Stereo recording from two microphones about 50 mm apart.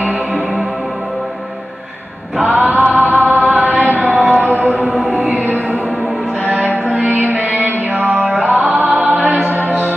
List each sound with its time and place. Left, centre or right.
0.0 s music: right
2.4 s chant: right
4.2 s music: centre
4.5 s music: right
6.4 s music: right